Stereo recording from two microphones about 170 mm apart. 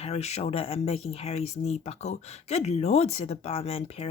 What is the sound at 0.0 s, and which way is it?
Speech, 40° left (ahead or behind).